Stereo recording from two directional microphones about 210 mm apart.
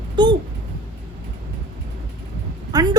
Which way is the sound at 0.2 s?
20° right (ahead or behind).